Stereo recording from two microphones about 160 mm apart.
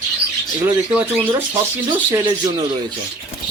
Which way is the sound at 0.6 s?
10° right (ahead or behind).